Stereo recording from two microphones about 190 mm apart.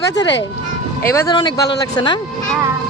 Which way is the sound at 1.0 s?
15° left (ahead or behind).